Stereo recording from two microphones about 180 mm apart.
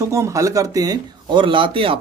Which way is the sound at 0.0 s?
15° right (ahead or behind).